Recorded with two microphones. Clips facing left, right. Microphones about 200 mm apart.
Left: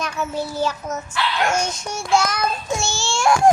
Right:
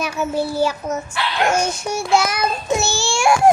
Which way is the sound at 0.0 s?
10° right (ahead or behind).